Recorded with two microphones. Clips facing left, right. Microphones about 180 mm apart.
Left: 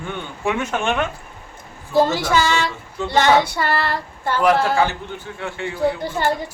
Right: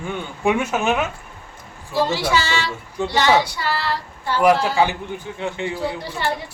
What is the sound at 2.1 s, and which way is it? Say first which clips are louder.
Speech: left 2 dB; 50° left (ahead or behind).